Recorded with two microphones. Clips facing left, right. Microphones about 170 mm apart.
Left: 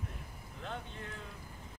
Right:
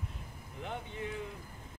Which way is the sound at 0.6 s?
15° right (ahead or behind).